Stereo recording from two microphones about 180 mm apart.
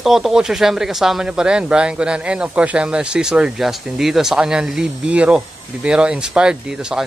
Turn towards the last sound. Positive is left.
turn(degrees=-5)  # may be behind; listen again after turning